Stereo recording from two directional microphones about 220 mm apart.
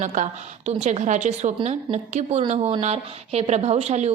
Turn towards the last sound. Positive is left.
turn(degrees=-30)  # may be behind; listen again after turning